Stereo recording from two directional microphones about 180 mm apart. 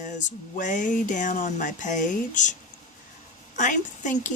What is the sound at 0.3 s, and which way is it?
Speech, 45° left (ahead or behind).